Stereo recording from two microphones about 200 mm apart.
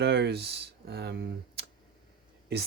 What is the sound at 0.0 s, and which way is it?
Speech, 55° right (ahead or behind).